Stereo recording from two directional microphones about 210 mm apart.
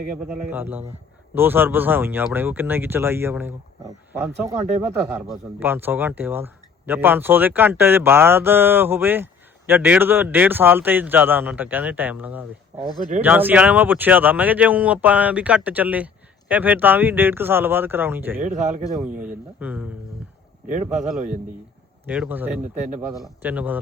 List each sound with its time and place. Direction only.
0.5 s speech: 10° right (ahead or behind)
5.3 s speech: 10° right (ahead or behind)
18.3 s a man's voice: 35° right (ahead or behind)
19.5 s speech: 10° right (ahead or behind)
20.7 s a man's voice: 35° right (ahead or behind)
22.0 s speech: 5° right (ahead or behind)